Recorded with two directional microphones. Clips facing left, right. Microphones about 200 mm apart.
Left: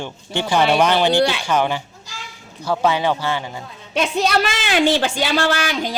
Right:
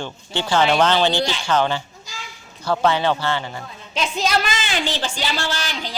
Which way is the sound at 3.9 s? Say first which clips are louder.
Left 3 dB; 60° left (ahead or behind).